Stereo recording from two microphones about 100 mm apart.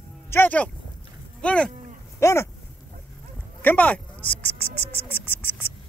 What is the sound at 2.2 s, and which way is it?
Speech, 30° left (ahead or behind).